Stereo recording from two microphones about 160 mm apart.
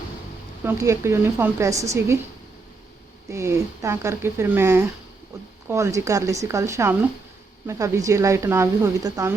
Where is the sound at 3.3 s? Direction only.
15° right (ahead or behind).